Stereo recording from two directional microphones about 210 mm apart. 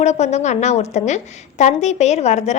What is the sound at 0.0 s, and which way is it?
A woman's voice, 30° left (ahead or behind).